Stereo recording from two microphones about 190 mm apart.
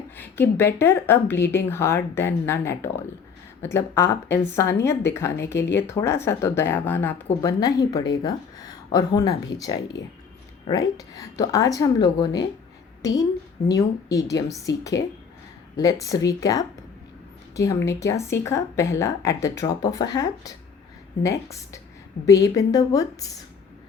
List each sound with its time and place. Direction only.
0.2 s a woman's voice: 10° left (ahead or behind)
16.0 s a woman's voice: 20° left (ahead or behind)
22.2 s a woman's voice: 45° left (ahead or behind)
22.5 s a woman's voice: 20° left (ahead or behind)